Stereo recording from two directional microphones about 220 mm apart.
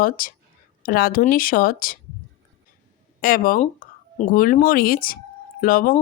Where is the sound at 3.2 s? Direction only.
40° left (ahead or behind).